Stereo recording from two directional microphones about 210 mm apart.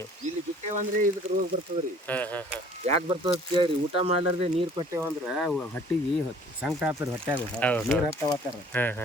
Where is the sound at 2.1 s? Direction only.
10° left (ahead or behind).